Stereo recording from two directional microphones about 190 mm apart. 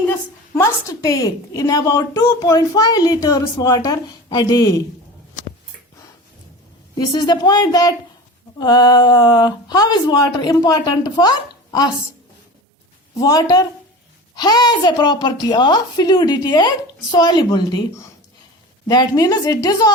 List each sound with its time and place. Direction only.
0.5 s a woman's voice: 15° left (ahead or behind)
6.9 s a woman's voice: 20° left (ahead or behind)
13.1 s a woman's voice: 20° left (ahead or behind)